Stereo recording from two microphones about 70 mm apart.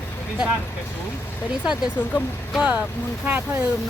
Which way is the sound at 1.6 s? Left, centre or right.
Centre.